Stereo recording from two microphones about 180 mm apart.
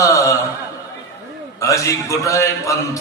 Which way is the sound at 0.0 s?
15° left (ahead or behind).